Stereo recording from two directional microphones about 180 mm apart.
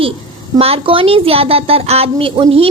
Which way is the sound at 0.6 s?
30° right (ahead or behind).